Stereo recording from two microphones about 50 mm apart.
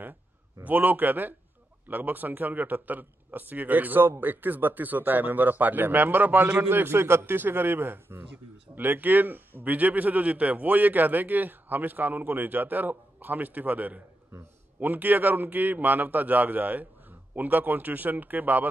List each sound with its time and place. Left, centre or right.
0.7 s a man's voice: right